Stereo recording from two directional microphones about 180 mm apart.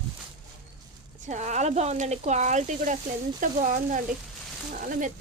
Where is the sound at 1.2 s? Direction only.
40° right (ahead or behind).